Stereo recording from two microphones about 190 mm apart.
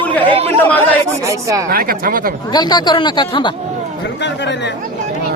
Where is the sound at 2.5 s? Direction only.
20° left (ahead or behind).